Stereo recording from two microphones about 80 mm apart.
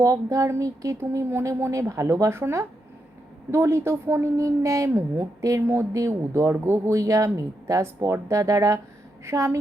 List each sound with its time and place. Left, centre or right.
0.0 s a woman's voice: right